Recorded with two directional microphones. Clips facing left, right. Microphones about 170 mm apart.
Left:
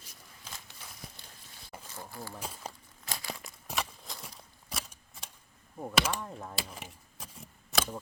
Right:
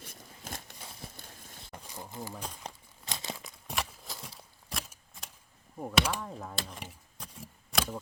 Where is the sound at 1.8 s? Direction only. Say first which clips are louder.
Right 2 dB; 15° right (ahead or behind).